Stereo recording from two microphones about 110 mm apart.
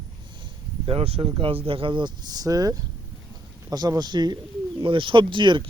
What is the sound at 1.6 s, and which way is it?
Speech, 50° right (ahead or behind).